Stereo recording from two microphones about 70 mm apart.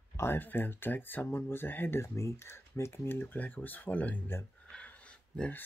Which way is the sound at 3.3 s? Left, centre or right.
Left.